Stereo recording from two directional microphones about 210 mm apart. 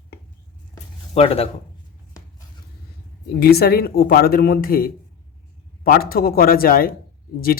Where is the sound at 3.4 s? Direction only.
45° left (ahead or behind).